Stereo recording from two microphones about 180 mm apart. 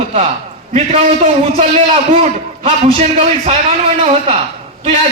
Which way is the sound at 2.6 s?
30° right (ahead or behind).